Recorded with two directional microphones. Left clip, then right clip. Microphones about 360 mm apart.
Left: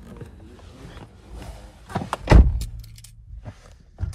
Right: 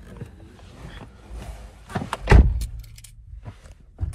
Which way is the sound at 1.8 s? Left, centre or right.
Centre.